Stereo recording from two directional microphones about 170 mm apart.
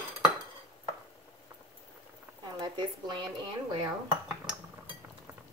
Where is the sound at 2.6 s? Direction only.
25° right (ahead or behind).